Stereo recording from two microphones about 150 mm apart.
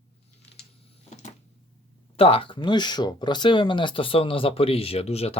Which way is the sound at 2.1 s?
40° left (ahead or behind).